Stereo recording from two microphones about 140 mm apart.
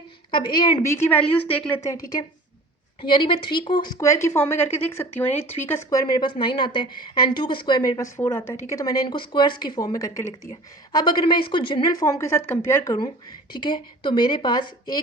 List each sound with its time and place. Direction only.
0.3 s a woman's voice: 35° left (ahead or behind)
0.8 s a woman's voice: 20° left (ahead or behind)
8.1 s a woman's voice: 15° left (ahead or behind)